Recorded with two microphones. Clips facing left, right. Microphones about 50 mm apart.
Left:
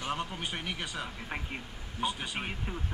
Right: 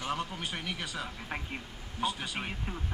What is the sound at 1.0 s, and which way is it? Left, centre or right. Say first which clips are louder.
Speech: even; centre.